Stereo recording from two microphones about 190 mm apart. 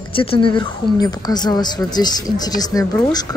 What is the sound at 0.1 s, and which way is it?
Speech, 30° left (ahead or behind).